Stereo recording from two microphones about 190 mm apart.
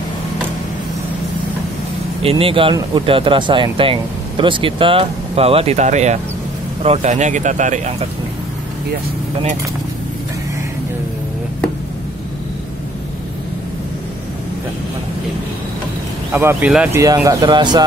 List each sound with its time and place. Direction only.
2.2 s speech: 30° right (ahead or behind)
16.3 s speech: 15° right (ahead or behind)
17.0 s speech: 15° right (ahead or behind)